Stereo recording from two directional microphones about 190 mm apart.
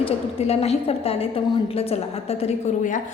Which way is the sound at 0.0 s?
30° left (ahead or behind).